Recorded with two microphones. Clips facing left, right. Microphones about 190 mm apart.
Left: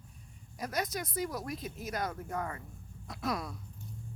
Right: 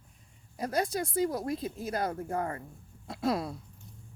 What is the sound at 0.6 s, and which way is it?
Speech, 30° right (ahead or behind).